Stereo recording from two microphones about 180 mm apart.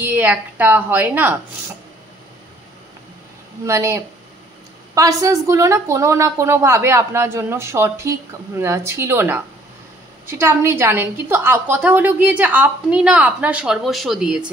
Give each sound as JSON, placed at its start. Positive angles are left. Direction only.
{"t": 0.0, "sound": "speech", "side_deg": -10}
{"t": 3.6, "sound": "speech", "side_deg": -15}